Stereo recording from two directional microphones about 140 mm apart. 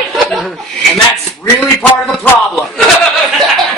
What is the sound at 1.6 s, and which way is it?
Speech, 5° left (ahead or behind).